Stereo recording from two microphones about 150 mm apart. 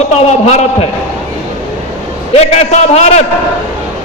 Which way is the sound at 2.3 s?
45° left (ahead or behind).